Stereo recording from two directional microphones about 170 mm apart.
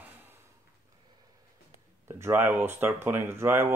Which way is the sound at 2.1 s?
15° right (ahead or behind).